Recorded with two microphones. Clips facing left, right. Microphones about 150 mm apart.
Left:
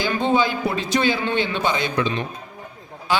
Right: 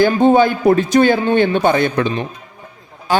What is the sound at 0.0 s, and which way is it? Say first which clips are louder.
A man's voice: right 9 dB; 50° right (ahead or behind).